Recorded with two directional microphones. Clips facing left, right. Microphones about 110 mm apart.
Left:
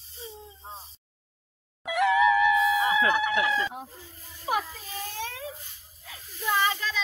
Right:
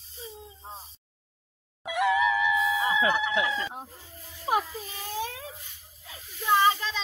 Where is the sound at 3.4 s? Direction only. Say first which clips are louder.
Left 2 dB; 25° right (ahead or behind).